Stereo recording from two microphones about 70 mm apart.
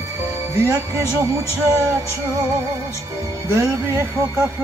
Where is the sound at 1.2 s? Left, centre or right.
Right.